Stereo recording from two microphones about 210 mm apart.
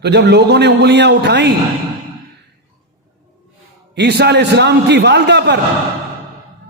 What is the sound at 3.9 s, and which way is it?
A man's voice, 50° right (ahead or behind).